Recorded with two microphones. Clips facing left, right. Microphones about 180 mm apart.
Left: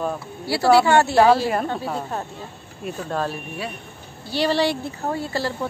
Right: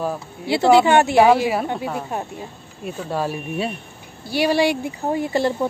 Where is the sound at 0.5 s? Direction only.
20° right (ahead or behind).